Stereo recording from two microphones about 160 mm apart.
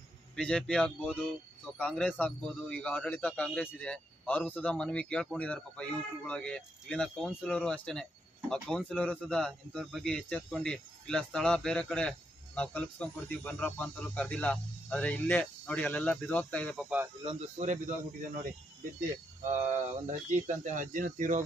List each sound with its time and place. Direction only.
0.4 s a man's voice: 5° left (ahead or behind)
16.7 s speech: 10° right (ahead or behind)
17.2 s speech: 40° right (ahead or behind)
18.9 s speech: 50° right (ahead or behind)